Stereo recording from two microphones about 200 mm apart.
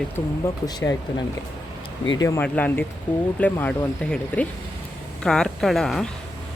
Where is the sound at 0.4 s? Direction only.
15° left (ahead or behind).